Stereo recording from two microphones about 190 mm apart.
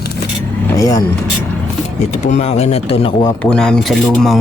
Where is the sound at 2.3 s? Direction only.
35° left (ahead or behind).